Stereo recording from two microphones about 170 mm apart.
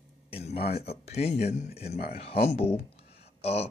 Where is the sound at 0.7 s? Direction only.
35° left (ahead or behind).